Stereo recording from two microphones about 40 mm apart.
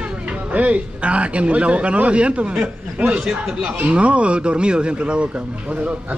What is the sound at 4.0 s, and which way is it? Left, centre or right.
Speech, right.